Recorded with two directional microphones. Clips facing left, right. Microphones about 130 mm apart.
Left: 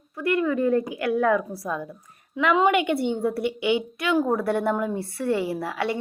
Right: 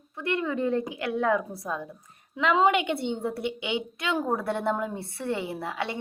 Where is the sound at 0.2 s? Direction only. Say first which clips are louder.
Left 5 dB; 25° right (ahead or behind).